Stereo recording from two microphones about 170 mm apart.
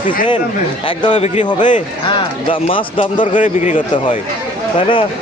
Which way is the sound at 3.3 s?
45° left (ahead or behind).